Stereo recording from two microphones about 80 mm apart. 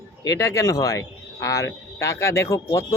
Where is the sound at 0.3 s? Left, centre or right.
Left.